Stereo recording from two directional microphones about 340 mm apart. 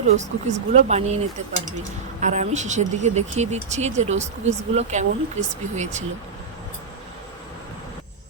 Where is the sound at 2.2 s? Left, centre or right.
Right.